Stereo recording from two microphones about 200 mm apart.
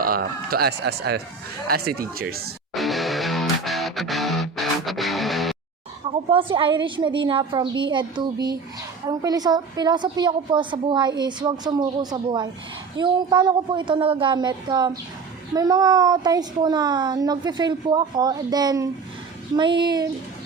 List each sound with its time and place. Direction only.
0.0 s speech: 50° right (ahead or behind)
2.7 s music: centre (ahead or behind)
6.1 s a woman's voice: 25° right (ahead or behind)